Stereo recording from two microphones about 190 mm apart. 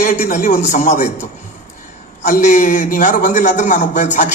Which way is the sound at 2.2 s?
40° left (ahead or behind).